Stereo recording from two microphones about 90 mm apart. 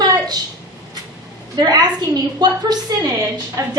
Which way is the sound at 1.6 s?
45° right (ahead or behind).